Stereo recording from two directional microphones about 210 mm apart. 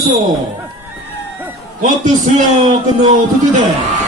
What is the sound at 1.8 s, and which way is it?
Speech, 40° right (ahead or behind).